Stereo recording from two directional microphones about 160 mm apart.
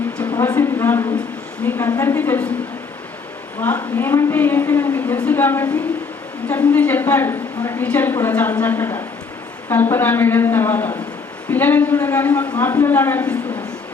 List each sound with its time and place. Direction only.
0.3 s a man's voice: 15° left (ahead or behind)
3.6 s a man's voice: 10° left (ahead or behind)